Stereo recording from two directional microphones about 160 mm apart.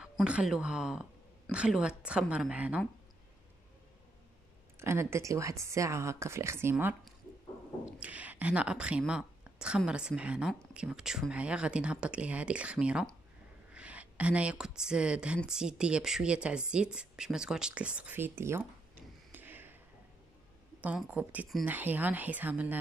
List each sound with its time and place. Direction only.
0.2 s speech: 5° right (ahead or behind)
4.7 s speech: 15° right (ahead or behind)
20.8 s speech: 10° right (ahead or behind)